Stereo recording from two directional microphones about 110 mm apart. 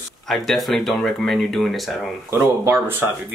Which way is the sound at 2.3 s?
20° right (ahead or behind).